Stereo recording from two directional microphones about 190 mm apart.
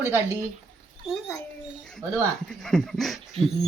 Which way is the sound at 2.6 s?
Centre (ahead or behind).